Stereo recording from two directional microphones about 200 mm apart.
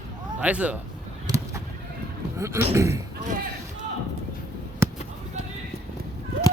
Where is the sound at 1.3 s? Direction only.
20° right (ahead or behind).